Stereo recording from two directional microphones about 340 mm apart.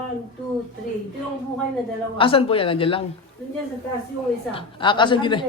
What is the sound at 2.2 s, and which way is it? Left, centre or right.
Speech, centre.